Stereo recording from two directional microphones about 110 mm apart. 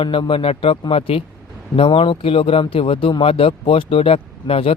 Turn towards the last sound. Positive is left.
turn(degrees=60)  # may be behind; listen again after turning